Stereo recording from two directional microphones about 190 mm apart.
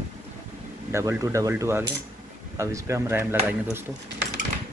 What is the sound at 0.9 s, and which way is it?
Speech, 15° right (ahead or behind).